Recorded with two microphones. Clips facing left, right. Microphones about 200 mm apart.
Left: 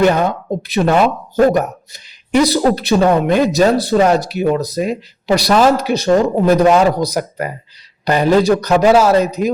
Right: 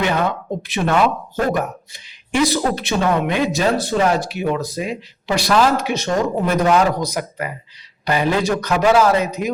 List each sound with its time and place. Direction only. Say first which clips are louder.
0.0 s speech: left 6 dB; 45° left (ahead or behind)